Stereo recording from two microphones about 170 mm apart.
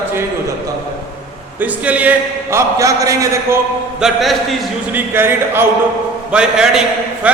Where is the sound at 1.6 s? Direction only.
10° right (ahead or behind).